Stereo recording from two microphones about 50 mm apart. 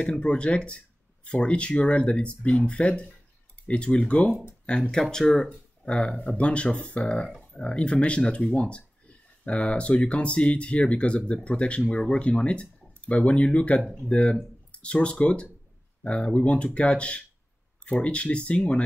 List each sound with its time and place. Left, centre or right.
0.2 s speech: left